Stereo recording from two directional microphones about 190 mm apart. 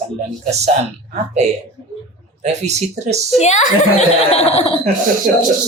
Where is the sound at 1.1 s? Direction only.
40° right (ahead or behind).